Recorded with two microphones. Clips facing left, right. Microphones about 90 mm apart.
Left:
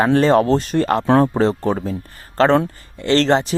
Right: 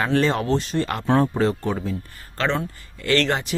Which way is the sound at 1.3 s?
35° left (ahead or behind).